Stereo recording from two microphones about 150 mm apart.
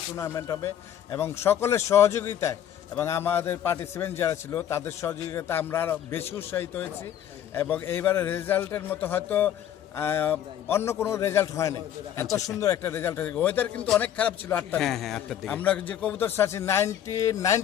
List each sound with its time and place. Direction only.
0.2 s a man's voice: 20° left (ahead or behind)